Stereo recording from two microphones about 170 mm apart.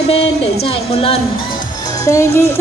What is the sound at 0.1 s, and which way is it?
Speech, 35° left (ahead or behind).